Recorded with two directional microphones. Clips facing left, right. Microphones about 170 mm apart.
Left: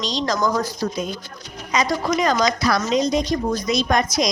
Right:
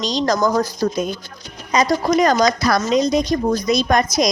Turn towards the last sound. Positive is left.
turn(degrees=-45)  # may be behind; listen again after turning